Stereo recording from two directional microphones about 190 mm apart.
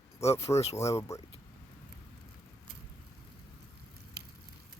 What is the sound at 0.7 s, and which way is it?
Speech, 15° left (ahead or behind).